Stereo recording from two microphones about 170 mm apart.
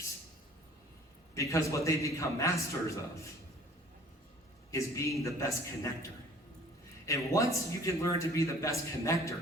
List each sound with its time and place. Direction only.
1.4 s a man's voice: 20° left (ahead or behind)
4.7 s a man's voice: 15° left (ahead or behind)